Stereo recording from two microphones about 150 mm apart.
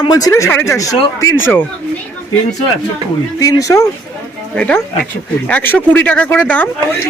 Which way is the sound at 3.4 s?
20° left (ahead or behind).